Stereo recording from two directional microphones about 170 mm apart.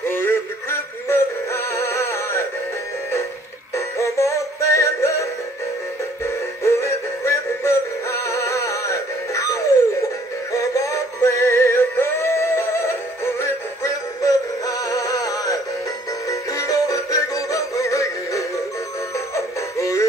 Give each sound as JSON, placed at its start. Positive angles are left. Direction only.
{"t": 0.0, "sound": "synthetic singing", "side_deg": 15}
{"t": 3.7, "sound": "music", "side_deg": 15}
{"t": 6.2, "sound": "synthetic singing", "side_deg": 15}
{"t": 19.1, "sound": "music", "side_deg": 20}